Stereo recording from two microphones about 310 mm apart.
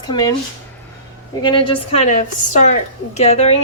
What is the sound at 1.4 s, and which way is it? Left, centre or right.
A woman's voice, centre.